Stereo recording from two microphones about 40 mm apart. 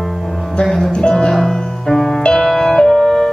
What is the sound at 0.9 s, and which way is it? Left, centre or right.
Music, left.